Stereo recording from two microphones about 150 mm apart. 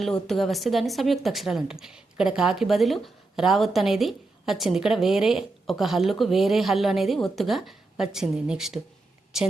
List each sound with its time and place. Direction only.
0.0 s a woman's voice: centre (ahead or behind)